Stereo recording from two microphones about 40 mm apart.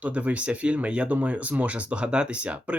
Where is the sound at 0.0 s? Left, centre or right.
Right.